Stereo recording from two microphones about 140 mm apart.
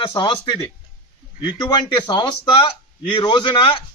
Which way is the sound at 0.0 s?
35° left (ahead or behind).